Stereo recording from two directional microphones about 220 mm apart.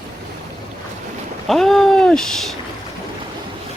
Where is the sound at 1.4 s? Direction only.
Centre (ahead or behind).